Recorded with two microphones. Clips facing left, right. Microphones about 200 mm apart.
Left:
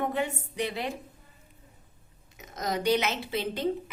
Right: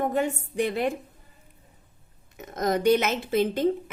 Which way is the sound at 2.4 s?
50° right (ahead or behind).